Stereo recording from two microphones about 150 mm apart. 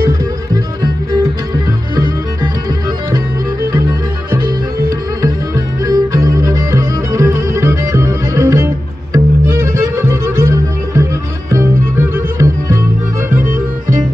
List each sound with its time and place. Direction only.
5.9 s music: 20° right (ahead or behind)